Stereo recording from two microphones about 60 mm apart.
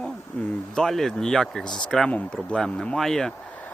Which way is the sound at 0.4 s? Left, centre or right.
Left.